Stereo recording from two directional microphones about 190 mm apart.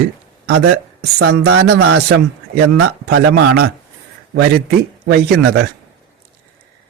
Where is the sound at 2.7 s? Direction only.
60° right (ahead or behind).